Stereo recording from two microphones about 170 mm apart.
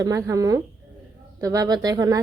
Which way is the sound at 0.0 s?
20° right (ahead or behind).